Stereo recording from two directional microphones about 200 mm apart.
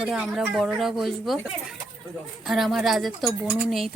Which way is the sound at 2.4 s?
Centre (ahead or behind).